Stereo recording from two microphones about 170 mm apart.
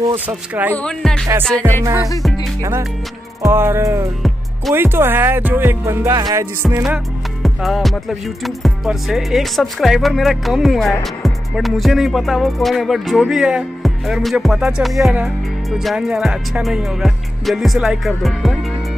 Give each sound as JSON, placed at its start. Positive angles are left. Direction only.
{"t": 0.1, "sound": "music", "side_deg": -10}
{"t": 0.7, "sound": "music", "side_deg": 5}
{"t": 1.5, "sound": "music", "side_deg": -20}
{"t": 3.4, "sound": "music", "side_deg": -15}
{"t": 7.4, "sound": "music", "side_deg": 0}